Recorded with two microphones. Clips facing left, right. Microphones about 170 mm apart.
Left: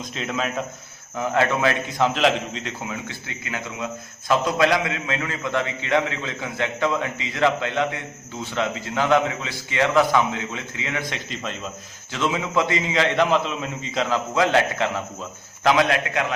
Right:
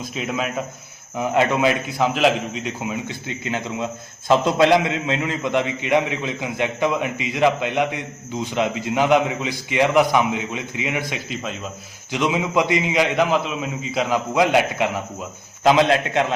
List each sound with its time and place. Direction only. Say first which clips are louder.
0.0 s a man's voice: right 2 dB; 5° right (ahead or behind)
15.6 s a man's voice: right 3 dB; 25° right (ahead or behind)